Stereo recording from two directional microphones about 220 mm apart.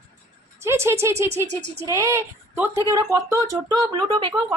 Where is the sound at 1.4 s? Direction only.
30° right (ahead or behind).